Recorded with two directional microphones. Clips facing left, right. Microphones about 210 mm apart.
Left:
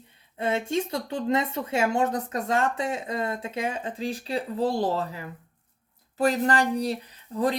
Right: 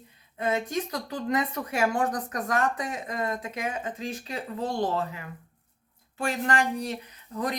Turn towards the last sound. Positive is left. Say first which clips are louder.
# left 5 dB
turn(degrees=30)  # may be behind; listen again after turning